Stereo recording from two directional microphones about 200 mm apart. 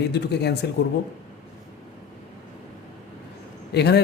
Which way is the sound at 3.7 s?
55° left (ahead or behind).